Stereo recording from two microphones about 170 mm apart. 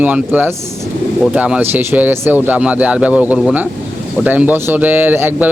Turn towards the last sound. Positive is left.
turn(degrees=-10)  # may be behind; listen again after turning